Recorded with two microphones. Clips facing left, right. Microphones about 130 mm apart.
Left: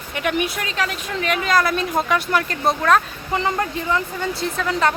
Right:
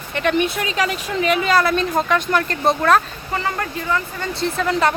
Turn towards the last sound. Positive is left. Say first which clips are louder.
# right 2 dB
turn(degrees=0)  # may be behind; listen again after turning